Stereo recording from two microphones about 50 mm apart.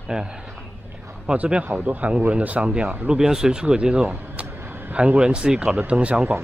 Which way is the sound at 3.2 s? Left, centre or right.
Centre.